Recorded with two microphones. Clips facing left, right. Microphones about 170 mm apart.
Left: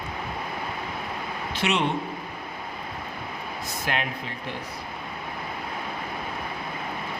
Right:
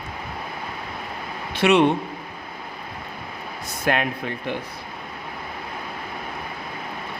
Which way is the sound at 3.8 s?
55° right (ahead or behind).